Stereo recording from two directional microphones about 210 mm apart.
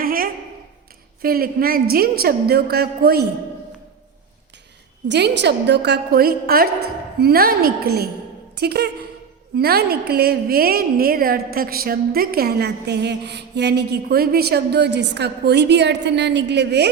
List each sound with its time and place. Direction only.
0.0 s a sound: 45° right (ahead or behind)
1.2 s a woman's voice: 45° right (ahead or behind)
5.0 s a woman's voice: 55° right (ahead or behind)